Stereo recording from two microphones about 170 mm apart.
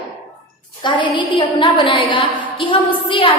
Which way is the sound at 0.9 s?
30° left (ahead or behind).